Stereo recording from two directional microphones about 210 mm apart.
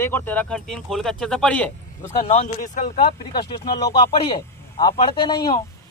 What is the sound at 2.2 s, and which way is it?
Speech, 35° left (ahead or behind).